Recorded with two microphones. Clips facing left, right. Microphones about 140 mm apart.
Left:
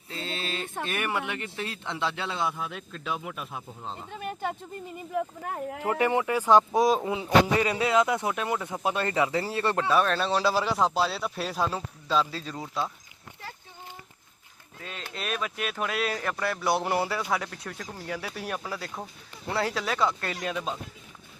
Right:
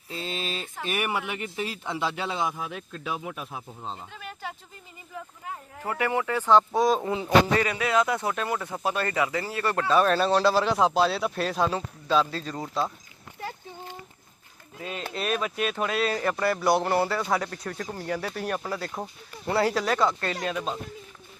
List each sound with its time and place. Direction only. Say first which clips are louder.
0.2 s a sound: right 1 dB; 15° right (ahead or behind)
0.9 s speech: right 3 dB; 10° right (ahead or behind)
4.1 s a sound: left 6 dB; 50° left (ahead or behind)
5.1 s speech: left 8 dB; 60° left (ahead or behind)
5.8 s speech: left 2 dB; 20° left (ahead or behind); by 7.3 s 5° left (ahead or behind)
7.5 s speech: even; 25° left (ahead or behind)
9.9 s speech: right 5 dB; centre (ahead or behind)
14.8 s speech: right 6 dB; 10° right (ahead or behind)